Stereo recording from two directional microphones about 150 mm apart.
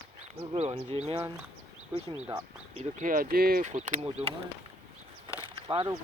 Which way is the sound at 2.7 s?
60° right (ahead or behind).